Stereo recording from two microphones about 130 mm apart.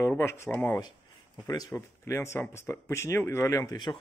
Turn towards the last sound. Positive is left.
turn(degrees=25)  # may be behind; listen again after turning